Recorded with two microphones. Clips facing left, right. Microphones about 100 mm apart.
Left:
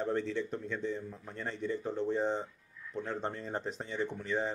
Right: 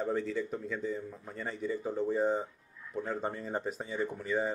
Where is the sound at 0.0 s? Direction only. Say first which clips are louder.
Right 1 dB; 5° right (ahead or behind).